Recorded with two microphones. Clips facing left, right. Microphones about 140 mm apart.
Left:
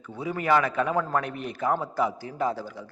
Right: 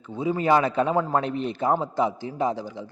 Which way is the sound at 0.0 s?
20° right (ahead or behind).